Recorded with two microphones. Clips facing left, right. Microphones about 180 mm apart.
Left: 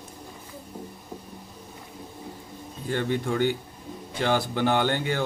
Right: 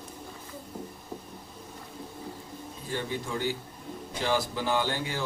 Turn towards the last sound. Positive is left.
turn(degrees=65)  # may be behind; listen again after turning